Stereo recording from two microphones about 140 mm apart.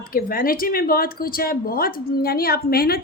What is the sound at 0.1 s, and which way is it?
Speech, 90° left.